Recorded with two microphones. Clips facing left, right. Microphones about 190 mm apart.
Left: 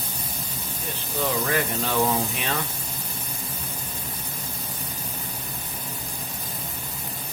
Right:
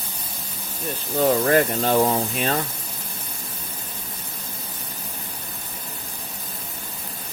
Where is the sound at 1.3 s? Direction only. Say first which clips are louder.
Right 8 dB; 50° right (ahead or behind).